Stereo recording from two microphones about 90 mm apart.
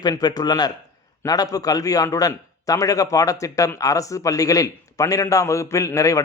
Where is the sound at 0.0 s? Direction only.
50° left (ahead or behind).